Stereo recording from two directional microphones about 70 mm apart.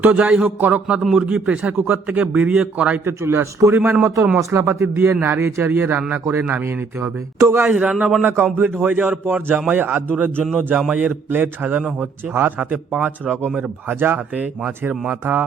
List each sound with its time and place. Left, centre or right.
0.0 s speech: right
3.0 s speech: right
3.8 s speech: right
4.0 s speech: right
7.6 s speech: centre
8.2 s speech: right
8.8 s speech: centre
11.9 s speech: right